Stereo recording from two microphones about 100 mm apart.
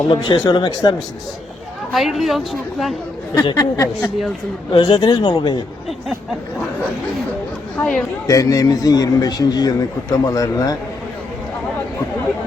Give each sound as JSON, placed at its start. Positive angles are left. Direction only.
{"t": 0.1, "sound": "speech", "side_deg": 50}
{"t": 1.9, "sound": "a woman's voice", "side_deg": 0}
{"t": 3.3, "sound": "a man's voice", "side_deg": 40}
{"t": 3.6, "sound": "a woman's voice", "side_deg": 30}
{"t": 4.7, "sound": "speech", "side_deg": 45}
{"t": 7.8, "sound": "a woman's voice", "side_deg": 5}
{"t": 8.3, "sound": "a man's voice", "side_deg": 35}